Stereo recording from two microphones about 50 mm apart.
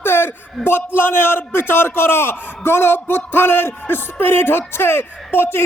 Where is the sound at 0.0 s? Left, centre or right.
Left.